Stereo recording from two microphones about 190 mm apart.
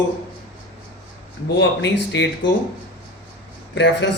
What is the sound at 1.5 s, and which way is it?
Speech, 70° left (ahead or behind).